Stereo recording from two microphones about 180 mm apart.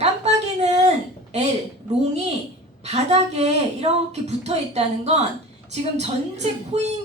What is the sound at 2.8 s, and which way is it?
A woman's voice, 35° right (ahead or behind).